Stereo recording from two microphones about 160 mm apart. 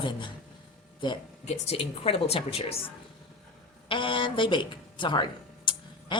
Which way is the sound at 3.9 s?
30° left (ahead or behind).